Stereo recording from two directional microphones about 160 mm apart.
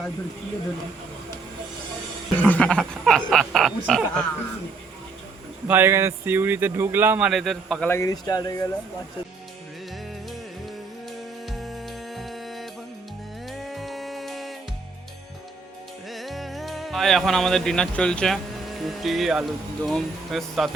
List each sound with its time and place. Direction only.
2.4 s speech: 10° left (ahead or behind)
5.6 s speech: 15° right (ahead or behind)
7.3 s speech: centre (ahead or behind)
7.9 s speech: 20° left (ahead or behind)
11.4 s music: centre (ahead or behind)
16.0 s music: centre (ahead or behind)
18.8 s speech: centre (ahead or behind)